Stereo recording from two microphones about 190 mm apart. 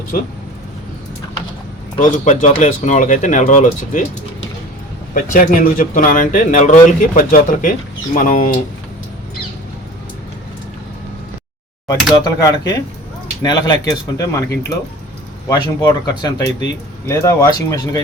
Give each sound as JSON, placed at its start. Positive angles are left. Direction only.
{"t": 2.0, "sound": "speech", "side_deg": 40}
{"t": 5.1, "sound": "speech", "side_deg": 45}
{"t": 12.1, "sound": "speech", "side_deg": 20}
{"t": 15.4, "sound": "speech", "side_deg": 20}
{"t": 16.5, "sound": "speech", "side_deg": 70}
{"t": 17.1, "sound": "speech", "side_deg": 15}